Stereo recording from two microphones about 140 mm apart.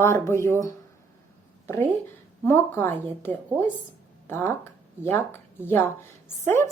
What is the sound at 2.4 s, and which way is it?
A woman's voice, 15° left (ahead or behind).